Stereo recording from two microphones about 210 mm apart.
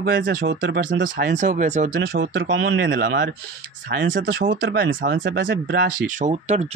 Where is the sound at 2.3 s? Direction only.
70° right (ahead or behind).